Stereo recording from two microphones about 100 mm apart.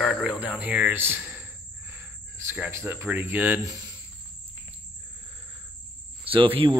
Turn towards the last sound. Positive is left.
turn(degrees=-60)  # may be behind; listen again after turning